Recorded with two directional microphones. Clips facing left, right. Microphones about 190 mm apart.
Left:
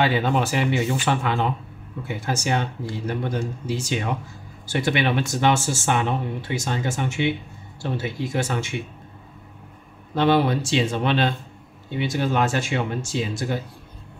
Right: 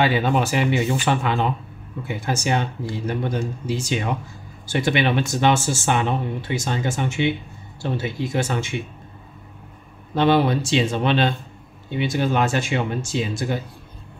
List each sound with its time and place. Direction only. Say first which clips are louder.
0.0 s speech: right 1 dB; 10° right (ahead or behind)
10.1 s speech: right 1 dB; 20° right (ahead or behind)